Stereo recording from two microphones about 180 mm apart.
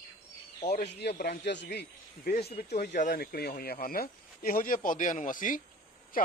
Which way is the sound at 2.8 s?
45° left (ahead or behind).